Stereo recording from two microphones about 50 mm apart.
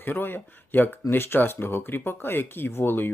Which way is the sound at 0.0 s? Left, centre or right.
Left.